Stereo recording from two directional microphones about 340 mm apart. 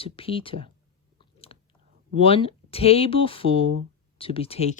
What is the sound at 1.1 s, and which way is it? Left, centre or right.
Chewing, centre.